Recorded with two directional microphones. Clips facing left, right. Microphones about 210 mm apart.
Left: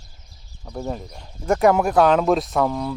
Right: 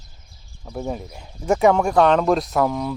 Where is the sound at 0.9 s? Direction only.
5° right (ahead or behind).